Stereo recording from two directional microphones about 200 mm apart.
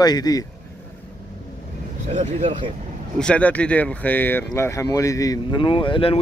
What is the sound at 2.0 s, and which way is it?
Speech, 35° right (ahead or behind).